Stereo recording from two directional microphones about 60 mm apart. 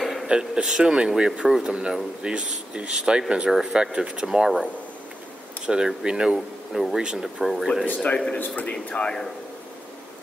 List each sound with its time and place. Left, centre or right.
0.0 s a sound: centre
0.3 s speech: centre
5.7 s speech: centre
7.8 s speech: left